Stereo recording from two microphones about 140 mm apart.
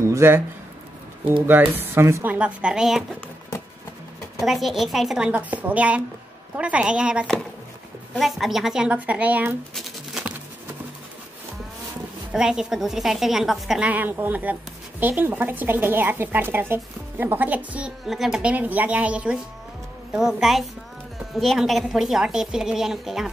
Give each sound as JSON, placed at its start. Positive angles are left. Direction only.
{"t": 0.0, "sound": "a sound", "side_deg": -20}
{"t": 1.8, "sound": "a woman's voice", "side_deg": -20}
{"t": 4.4, "sound": "a woman's voice", "side_deg": 0}
{"t": 9.8, "sound": "typewriter", "side_deg": 0}
{"t": 12.3, "sound": "a woman's voice", "side_deg": -5}